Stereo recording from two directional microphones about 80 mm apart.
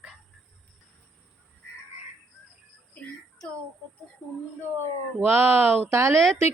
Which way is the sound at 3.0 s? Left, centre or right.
Centre.